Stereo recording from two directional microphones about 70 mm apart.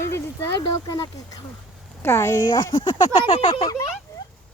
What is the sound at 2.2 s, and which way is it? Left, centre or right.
Speech, left.